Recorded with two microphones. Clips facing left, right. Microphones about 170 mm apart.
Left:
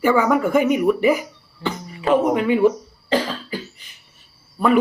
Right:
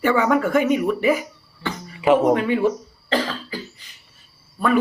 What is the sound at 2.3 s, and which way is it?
Speech, 10° left (ahead or behind).